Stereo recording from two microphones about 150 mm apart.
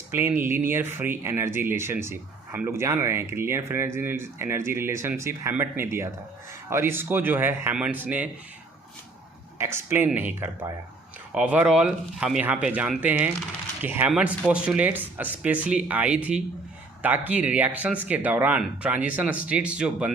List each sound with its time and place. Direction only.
0.1 s speech: 15° right (ahead or behind)
9.6 s speech: 15° right (ahead or behind)